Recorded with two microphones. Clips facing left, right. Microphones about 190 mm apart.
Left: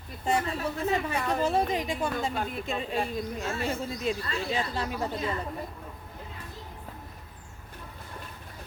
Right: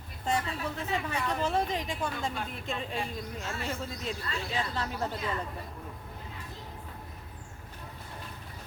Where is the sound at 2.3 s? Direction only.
40° left (ahead or behind).